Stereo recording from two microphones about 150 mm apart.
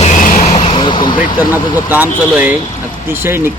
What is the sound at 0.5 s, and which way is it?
Vehicle, 35° left (ahead or behind).